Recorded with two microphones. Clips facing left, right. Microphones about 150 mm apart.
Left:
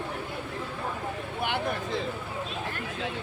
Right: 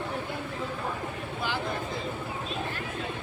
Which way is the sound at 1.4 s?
60° left (ahead or behind).